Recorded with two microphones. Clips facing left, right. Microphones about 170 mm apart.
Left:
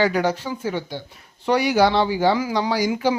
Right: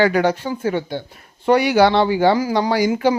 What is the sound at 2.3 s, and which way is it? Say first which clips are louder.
Speech: right 4 dB; 50° right (ahead or behind).